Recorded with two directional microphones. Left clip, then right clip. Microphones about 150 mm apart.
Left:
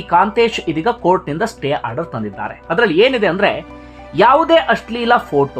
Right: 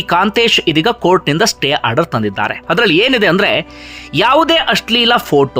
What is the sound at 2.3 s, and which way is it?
Speech, 35° right (ahead or behind).